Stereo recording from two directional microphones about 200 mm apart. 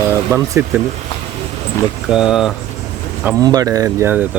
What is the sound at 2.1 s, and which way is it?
Speech, 5° right (ahead or behind).